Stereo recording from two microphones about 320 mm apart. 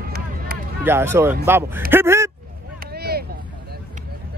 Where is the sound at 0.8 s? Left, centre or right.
Centre.